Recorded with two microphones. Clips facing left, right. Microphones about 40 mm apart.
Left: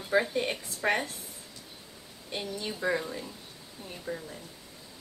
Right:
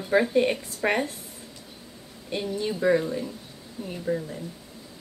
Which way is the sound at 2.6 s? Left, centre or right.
Centre.